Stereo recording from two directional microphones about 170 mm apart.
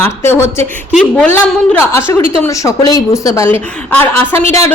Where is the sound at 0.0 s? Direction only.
15° left (ahead or behind).